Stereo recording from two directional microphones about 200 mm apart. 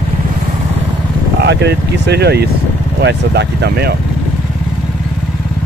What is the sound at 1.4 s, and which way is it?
Speech, 55° right (ahead or behind).